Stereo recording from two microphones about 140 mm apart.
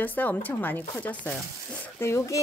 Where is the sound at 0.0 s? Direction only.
10° left (ahead or behind).